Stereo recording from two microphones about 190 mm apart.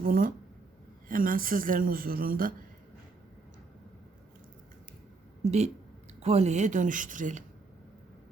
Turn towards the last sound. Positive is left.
turn(degrees=-45)  # may be behind; listen again after turning